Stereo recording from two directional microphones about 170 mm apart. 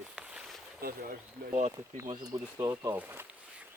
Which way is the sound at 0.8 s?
60° right (ahead or behind).